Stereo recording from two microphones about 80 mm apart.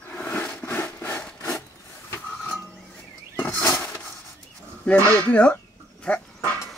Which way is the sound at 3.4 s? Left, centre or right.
Left.